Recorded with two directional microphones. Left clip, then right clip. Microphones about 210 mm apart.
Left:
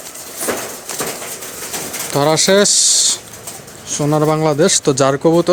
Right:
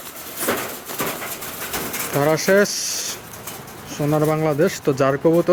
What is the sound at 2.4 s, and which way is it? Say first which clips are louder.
Speech: left 3 dB; 20° left (ahead or behind).